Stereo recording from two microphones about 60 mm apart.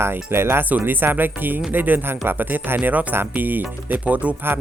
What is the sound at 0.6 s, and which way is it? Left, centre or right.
Speech, right.